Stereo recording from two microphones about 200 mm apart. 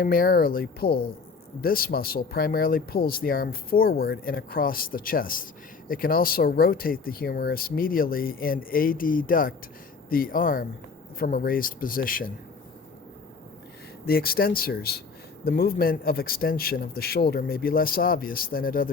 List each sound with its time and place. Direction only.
0.0 s speech: 45° left (ahead or behind)
14.0 s speech: 50° left (ahead or behind)